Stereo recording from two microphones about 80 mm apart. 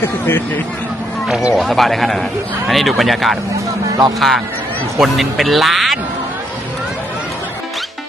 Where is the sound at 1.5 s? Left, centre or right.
Centre.